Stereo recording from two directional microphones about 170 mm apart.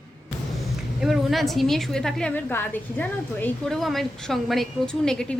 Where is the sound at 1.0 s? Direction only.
Centre (ahead or behind).